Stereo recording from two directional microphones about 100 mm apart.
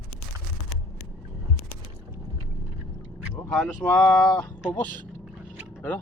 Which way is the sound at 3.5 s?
5° left (ahead or behind).